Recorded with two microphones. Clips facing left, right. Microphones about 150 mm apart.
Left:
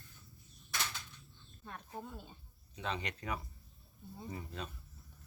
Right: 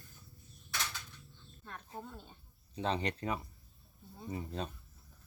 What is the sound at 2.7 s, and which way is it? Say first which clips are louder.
Speech: right 6 dB; 35° right (ahead or behind).